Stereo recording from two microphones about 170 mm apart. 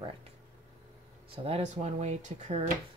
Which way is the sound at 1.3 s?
35° right (ahead or behind).